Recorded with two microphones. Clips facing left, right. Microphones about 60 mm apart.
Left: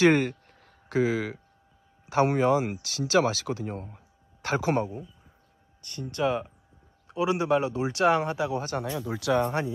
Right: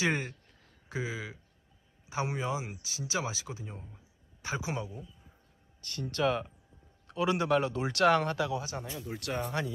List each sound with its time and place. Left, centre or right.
0.0 s speech: left
5.8 s speech: centre
8.7 s speech: left